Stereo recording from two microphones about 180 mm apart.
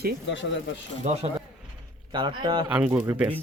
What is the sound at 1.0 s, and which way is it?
Speech, 35° right (ahead or behind).